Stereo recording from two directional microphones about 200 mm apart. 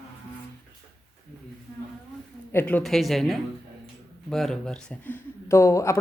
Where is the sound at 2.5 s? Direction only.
10° left (ahead or behind).